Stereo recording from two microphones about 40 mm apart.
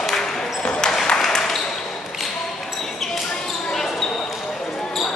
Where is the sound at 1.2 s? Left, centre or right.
Centre.